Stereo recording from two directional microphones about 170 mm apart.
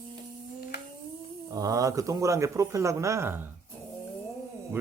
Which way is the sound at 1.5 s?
20° right (ahead or behind).